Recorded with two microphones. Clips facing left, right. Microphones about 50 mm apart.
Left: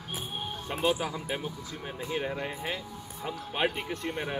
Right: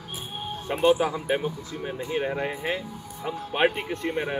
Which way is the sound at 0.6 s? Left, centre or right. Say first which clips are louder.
Right 8 dB; centre.